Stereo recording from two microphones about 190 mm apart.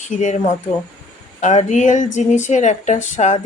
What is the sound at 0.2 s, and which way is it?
A woman's voice, 40° left (ahead or behind).